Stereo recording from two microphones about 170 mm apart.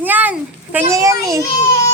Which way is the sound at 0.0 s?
10° right (ahead or behind).